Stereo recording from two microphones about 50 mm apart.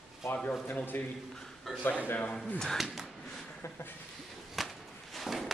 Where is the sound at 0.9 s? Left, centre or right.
Left.